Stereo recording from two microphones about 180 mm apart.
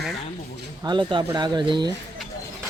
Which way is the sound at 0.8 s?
25° right (ahead or behind).